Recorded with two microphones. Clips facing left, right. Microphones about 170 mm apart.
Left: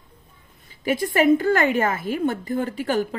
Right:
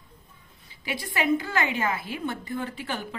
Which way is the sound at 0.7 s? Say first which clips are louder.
Left 11 dB; 45° left (ahead or behind).